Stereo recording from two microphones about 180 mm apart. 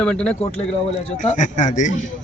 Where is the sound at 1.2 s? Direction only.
45° left (ahead or behind).